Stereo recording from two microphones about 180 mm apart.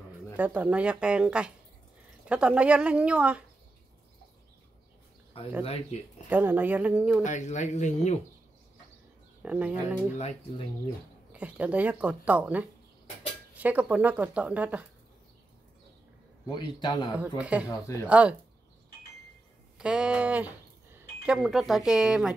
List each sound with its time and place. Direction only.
0.4 s speech: 10° right (ahead or behind)
5.6 s speech: 35° left (ahead or behind)
6.2 s speech: 10° right (ahead or behind)
7.2 s speech: 40° left (ahead or behind)
9.4 s speech: 5° right (ahead or behind)
10.1 s speech: 35° left (ahead or behind)
11.3 s speech: 5° right (ahead or behind)
16.4 s a man's voice: 25° left (ahead or behind)
17.4 s speech: 5° right (ahead or behind)
19.8 s speech: 5° right (ahead or behind)